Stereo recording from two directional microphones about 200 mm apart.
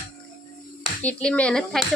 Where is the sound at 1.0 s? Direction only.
5° left (ahead or behind).